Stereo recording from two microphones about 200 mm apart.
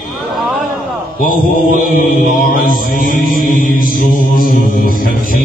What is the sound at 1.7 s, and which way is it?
Mantra, 45° left (ahead or behind).